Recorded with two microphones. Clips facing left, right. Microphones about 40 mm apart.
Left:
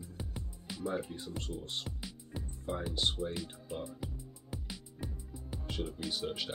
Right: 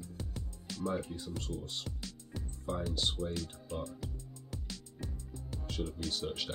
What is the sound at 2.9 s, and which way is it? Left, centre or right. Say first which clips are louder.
Speech: left 1 dB; centre.